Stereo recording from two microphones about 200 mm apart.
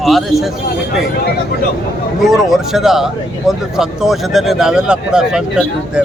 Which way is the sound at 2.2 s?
Centre (ahead or behind).